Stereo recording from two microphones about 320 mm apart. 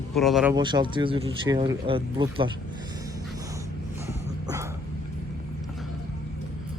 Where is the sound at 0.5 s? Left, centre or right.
Centre.